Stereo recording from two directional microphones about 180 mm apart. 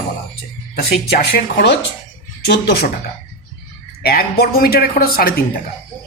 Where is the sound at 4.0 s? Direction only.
60° left (ahead or behind).